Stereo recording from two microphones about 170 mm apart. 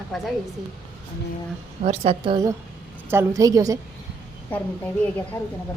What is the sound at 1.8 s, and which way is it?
Speech, 35° right (ahead or behind).